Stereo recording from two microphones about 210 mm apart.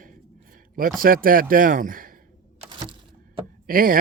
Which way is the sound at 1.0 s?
45° right (ahead or behind).